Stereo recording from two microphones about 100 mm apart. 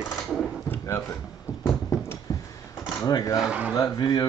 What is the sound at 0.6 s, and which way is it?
Speech, 25° left (ahead or behind).